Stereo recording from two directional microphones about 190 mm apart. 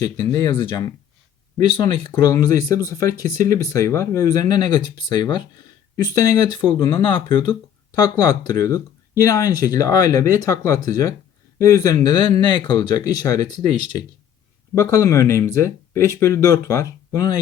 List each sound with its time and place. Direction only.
0.0 s speech: 20° left (ahead or behind)
1.7 s speech: 25° left (ahead or behind)
2.1 s speech: 15° left (ahead or behind)